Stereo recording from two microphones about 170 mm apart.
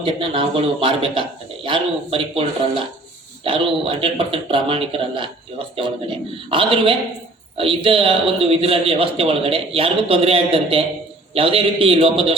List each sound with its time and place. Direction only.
0.0 s speech: 30° right (ahead or behind)
6.5 s speech: 30° right (ahead or behind)